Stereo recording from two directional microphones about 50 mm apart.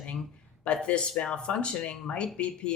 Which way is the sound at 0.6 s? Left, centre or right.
Left.